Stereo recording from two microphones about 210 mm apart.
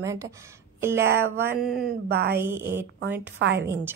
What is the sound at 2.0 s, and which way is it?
Speech, 50° right (ahead or behind).